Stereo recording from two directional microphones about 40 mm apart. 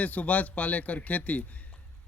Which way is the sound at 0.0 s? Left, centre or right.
Left.